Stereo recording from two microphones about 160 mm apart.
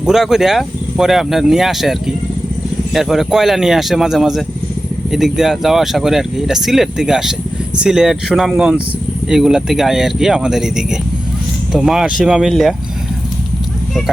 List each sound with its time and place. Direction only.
0.0 s speech: 5° right (ahead or behind)